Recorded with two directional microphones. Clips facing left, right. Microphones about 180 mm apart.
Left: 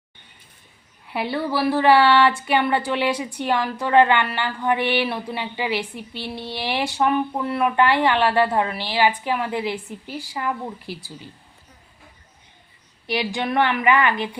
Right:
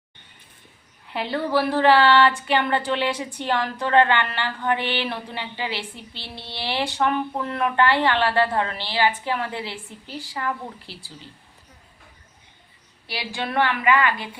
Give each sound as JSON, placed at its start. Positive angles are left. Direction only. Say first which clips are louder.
{"t": 1.1, "sound": "a woman's voice", "louder": "right 1 dB", "side_deg": 10}
{"t": 13.1, "sound": "a woman's voice", "louder": "left 6 dB", "side_deg": 20}